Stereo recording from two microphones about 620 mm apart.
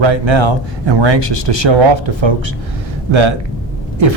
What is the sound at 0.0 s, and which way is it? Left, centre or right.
Speech, right.